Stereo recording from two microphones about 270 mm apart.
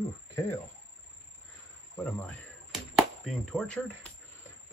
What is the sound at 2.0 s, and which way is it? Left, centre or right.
Chop, centre.